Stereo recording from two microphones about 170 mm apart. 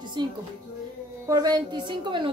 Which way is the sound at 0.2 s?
25° right (ahead or behind).